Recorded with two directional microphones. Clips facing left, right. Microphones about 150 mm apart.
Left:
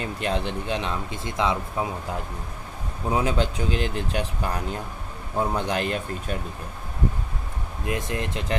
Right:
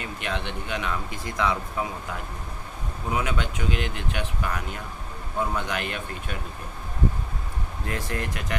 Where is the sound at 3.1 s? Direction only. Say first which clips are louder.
Left 4 dB; 35° left (ahead or behind).